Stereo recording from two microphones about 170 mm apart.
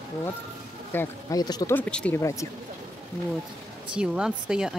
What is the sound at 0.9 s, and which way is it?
Speech, 15° left (ahead or behind).